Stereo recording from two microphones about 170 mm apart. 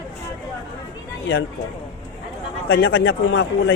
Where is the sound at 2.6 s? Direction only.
70° left (ahead or behind).